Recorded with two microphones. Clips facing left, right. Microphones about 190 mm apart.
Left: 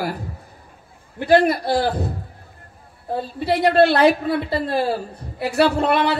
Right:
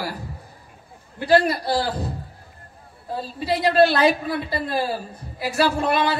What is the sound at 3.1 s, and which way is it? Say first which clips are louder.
A woman's voice: left 3 dB; 60° left (ahead or behind).